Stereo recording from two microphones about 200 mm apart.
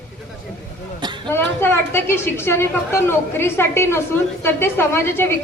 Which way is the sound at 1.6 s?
10° left (ahead or behind).